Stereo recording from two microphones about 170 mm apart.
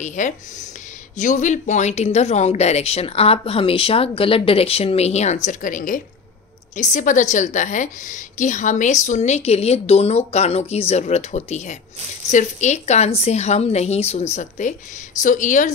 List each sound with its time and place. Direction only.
0.0 s a woman's voice: 45° left (ahead or behind)